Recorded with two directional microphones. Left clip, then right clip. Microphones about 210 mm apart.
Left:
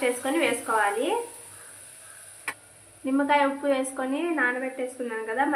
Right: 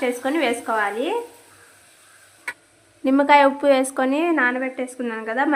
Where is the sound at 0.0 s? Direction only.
35° right (ahead or behind).